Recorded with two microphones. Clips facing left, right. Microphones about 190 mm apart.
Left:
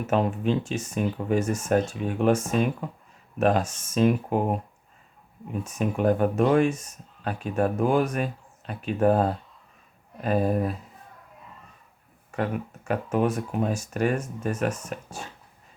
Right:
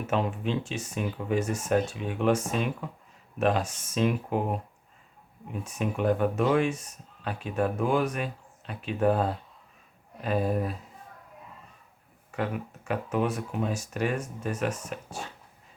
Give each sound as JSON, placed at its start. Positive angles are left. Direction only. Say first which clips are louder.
{"t": 0.1, "sound": "speech", "louder": "left 5 dB", "side_deg": 45}
{"t": 5.8, "sound": "speech", "louder": "left 3 dB", "side_deg": 45}
{"t": 12.4, "sound": "speech", "louder": "left 3 dB", "side_deg": 45}